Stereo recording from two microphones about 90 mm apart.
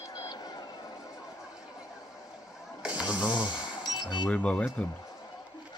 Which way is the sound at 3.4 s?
55° left (ahead or behind).